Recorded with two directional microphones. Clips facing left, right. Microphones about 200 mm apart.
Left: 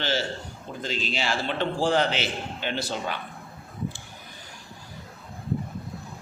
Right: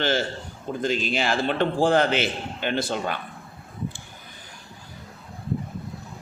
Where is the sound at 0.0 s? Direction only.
50° right (ahead or behind).